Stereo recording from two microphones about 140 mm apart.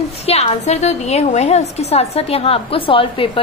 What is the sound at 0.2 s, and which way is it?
A woman's voice, 45° left (ahead or behind).